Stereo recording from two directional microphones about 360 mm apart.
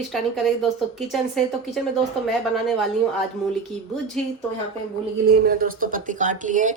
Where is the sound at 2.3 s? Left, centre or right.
Centre.